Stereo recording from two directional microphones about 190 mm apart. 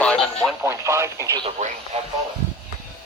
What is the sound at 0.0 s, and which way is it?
Radio, 5° left (ahead or behind).